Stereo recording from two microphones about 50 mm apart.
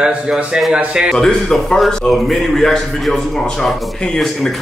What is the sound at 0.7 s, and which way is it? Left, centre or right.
Speech, right.